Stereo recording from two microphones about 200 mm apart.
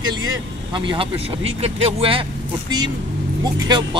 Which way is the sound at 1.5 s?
30° right (ahead or behind).